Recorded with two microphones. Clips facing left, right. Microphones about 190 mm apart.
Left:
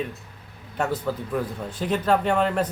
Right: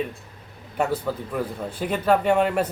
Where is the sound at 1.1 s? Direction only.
5° right (ahead or behind).